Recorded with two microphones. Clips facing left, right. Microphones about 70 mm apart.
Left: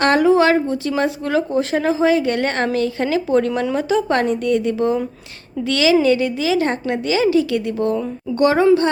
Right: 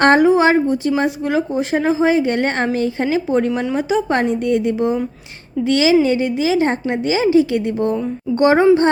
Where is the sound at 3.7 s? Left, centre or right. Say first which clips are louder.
Even; centre.